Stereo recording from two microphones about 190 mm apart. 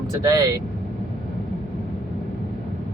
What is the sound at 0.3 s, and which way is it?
Speech, 20° right (ahead or behind).